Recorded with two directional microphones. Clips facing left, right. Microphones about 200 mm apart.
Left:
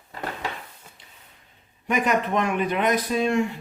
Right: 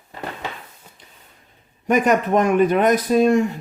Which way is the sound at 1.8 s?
45° right (ahead or behind).